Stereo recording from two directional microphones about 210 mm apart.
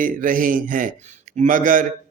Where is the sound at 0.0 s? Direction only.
40° right (ahead or behind).